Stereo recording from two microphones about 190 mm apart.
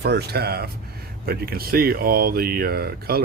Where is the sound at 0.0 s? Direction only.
60° right (ahead or behind).